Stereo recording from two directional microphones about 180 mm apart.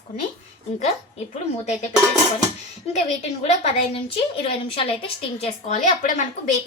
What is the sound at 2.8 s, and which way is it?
A woman's voice, 35° left (ahead or behind).